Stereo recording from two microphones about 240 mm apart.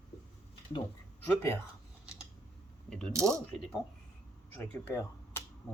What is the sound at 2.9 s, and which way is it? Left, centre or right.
Speech, centre.